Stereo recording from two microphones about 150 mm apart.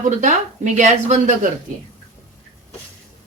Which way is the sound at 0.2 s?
55° right (ahead or behind).